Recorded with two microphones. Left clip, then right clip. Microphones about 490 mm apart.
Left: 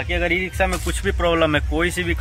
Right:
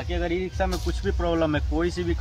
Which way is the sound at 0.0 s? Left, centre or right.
Right.